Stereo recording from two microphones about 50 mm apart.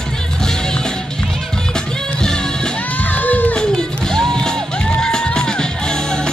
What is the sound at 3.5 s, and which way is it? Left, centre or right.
Music, centre.